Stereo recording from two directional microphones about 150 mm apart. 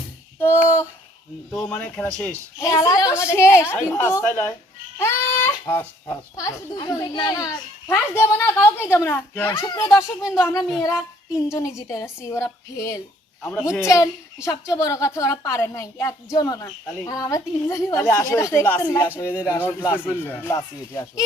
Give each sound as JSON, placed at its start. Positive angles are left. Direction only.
{"t": 0.3, "sound": "child singing", "side_deg": 15}
{"t": 1.5, "sound": "a woman's voice", "side_deg": 10}
{"t": 2.6, "sound": "a woman's voice", "side_deg": 20}
{"t": 7.3, "sound": "a woman's voice", "side_deg": 20}
{"t": 9.6, "sound": "a woman's voice", "side_deg": 25}
{"t": 10.0, "sound": "speech", "side_deg": -5}
{"t": 10.4, "sound": "a woman's voice", "side_deg": 25}
{"t": 13.6, "sound": "speech", "side_deg": -5}
{"t": 13.8, "sound": "a woman's voice", "side_deg": 20}